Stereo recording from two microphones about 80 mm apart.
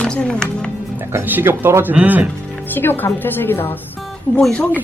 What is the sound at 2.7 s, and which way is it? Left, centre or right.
A woman's voice, left.